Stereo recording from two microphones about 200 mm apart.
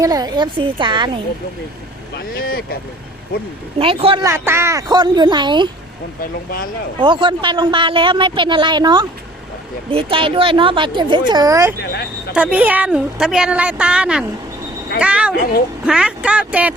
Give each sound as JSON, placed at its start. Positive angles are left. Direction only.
{"t": 0.0, "sound": "speech", "side_deg": -20}
{"t": 2.1, "sound": "speech", "side_deg": 50}
{"t": 3.8, "sound": "speech", "side_deg": -25}
{"t": 4.2, "sound": "speech", "side_deg": -15}
{"t": 7.0, "sound": "speech", "side_deg": -25}
{"t": 11.8, "sound": "speech", "side_deg": 55}
{"t": 12.3, "sound": "a woman's voice", "side_deg": -5}